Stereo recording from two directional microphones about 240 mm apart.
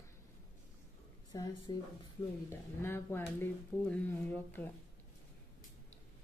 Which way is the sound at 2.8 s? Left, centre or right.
Centre.